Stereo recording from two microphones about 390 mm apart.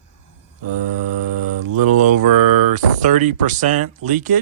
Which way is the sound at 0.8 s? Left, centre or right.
Right.